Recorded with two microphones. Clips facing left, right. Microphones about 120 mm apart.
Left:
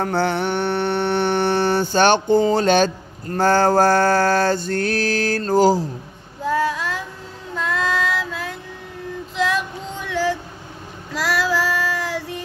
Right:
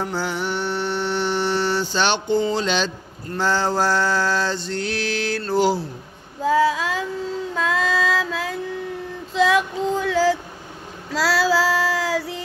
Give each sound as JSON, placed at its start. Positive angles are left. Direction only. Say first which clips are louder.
{"t": 0.0, "sound": "mantra", "louder": "left 5 dB", "side_deg": 60}
{"t": 6.4, "sound": "female singing", "louder": "right 3 dB", "side_deg": -90}
{"t": 8.3, "sound": "female singing", "louder": "right 4 dB", "side_deg": -90}
{"t": 11.1, "sound": "child singing", "louder": "right 2 dB", "side_deg": -90}